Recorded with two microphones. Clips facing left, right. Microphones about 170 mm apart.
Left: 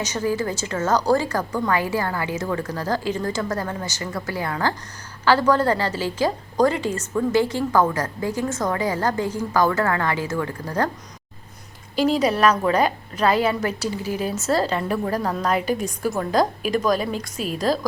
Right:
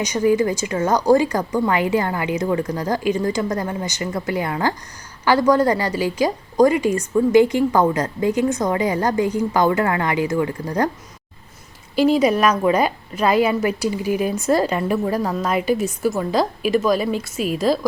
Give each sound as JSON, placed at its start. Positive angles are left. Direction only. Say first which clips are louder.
{"t": 0.0, "sound": "a woman's voice", "louder": "right 6 dB", "side_deg": -15}
{"t": 11.9, "sound": "a woman's voice", "louder": "right 4 dB", "side_deg": -10}